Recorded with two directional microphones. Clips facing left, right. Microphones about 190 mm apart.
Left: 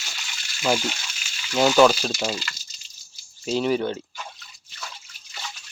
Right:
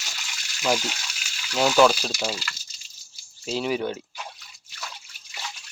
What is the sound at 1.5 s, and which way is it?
Speech, 5° left (ahead or behind).